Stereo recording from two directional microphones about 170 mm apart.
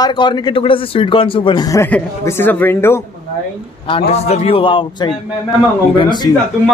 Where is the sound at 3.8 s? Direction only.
35° left (ahead or behind).